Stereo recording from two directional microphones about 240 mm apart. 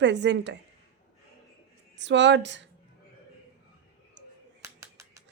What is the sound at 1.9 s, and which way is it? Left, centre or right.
Speech, right.